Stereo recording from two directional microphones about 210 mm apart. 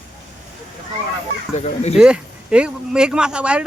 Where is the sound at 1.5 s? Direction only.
30° left (ahead or behind).